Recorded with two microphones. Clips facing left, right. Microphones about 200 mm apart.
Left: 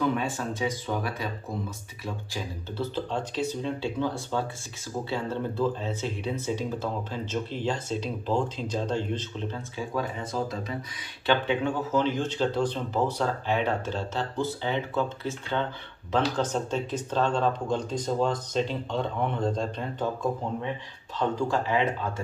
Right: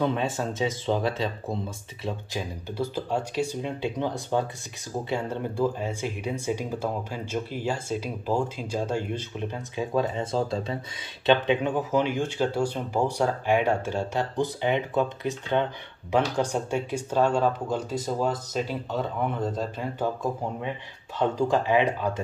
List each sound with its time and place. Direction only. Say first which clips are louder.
0.0 s speech: right 1 dB; 25° right (ahead or behind); by 20.1 s 5° right (ahead or behind)
21.4 s speech: right 5 dB; 20° right (ahead or behind)